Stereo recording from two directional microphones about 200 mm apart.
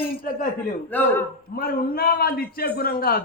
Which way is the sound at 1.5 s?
50° left (ahead or behind).